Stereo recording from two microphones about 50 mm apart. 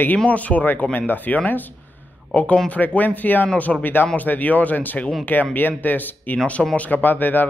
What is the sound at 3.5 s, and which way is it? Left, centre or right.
Speech, left.